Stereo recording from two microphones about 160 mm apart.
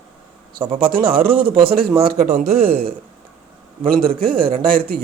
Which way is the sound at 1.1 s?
65° right (ahead or behind).